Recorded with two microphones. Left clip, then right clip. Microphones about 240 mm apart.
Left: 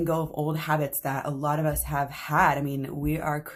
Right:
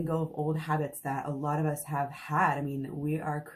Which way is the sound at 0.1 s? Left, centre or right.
Left.